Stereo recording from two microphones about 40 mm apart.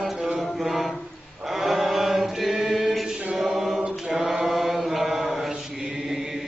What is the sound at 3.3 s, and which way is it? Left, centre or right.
Music, centre.